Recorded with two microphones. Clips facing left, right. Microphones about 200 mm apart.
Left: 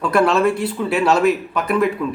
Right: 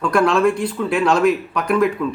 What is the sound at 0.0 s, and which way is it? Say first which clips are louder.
Speech: even; 5° left (ahead or behind).